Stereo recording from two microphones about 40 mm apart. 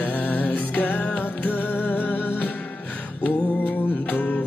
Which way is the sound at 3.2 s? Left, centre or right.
Left.